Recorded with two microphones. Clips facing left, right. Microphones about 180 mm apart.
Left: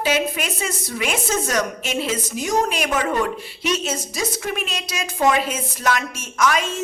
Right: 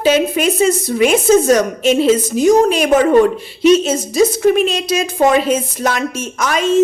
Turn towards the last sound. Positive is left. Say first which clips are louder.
# right 7 dB
turn(degrees=-20)  # may be behind; listen again after turning